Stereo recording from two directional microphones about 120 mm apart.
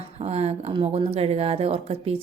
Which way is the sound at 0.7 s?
50° right (ahead or behind).